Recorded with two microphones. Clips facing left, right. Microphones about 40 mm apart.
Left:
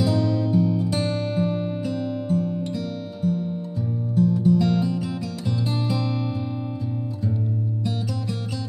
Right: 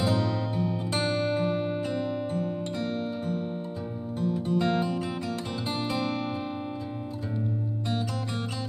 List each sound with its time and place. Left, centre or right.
0.0 s music: right